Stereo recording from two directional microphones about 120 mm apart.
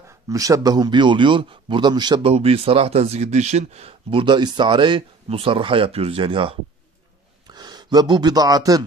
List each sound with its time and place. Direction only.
0.3 s a man's voice: 30° right (ahead or behind)
2.2 s speech: 55° right (ahead or behind); by 8.8 s 30° right (ahead or behind)